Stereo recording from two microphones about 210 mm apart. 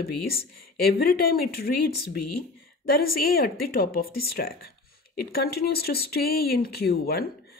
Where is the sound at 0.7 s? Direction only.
45° left (ahead or behind).